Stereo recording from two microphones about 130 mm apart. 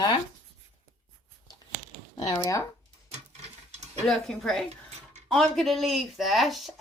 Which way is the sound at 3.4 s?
60° right (ahead or behind).